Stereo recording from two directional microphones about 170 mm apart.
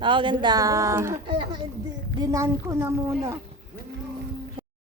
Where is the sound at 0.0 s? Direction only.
30° right (ahead or behind).